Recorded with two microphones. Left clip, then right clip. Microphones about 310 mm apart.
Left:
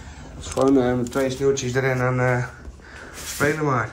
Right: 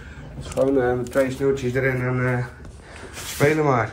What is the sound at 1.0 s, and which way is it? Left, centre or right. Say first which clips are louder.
Speech: right 1 dB; centre.